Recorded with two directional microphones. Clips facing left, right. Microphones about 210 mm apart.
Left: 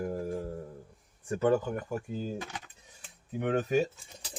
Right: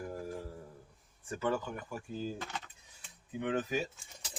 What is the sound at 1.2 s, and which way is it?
Speech, 40° left (ahead or behind).